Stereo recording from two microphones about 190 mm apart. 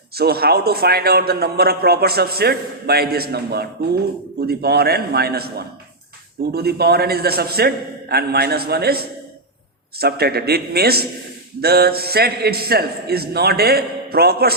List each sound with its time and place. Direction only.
0.2 s a man's voice: 55° right (ahead or behind)